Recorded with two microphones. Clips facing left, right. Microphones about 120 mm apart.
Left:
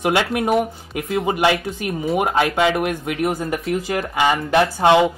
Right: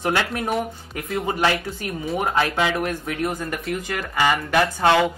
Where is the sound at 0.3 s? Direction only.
5° left (ahead or behind).